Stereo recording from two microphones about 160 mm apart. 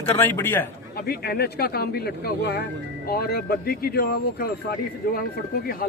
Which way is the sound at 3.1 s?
70° left (ahead or behind).